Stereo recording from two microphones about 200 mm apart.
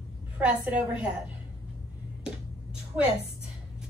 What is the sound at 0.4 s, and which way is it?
Speech, 5° right (ahead or behind).